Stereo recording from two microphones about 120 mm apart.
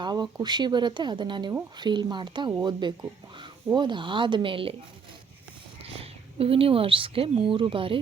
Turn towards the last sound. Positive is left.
turn(degrees=-45)  # may be behind; listen again after turning